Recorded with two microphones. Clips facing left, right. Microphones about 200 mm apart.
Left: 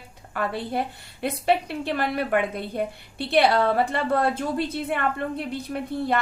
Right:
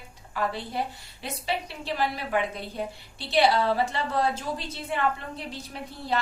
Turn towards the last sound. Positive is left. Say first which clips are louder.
# left 6 dB
turn(degrees=55)  # may be behind; listen again after turning